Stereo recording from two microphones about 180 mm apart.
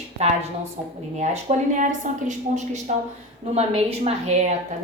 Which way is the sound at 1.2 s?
40° right (ahead or behind).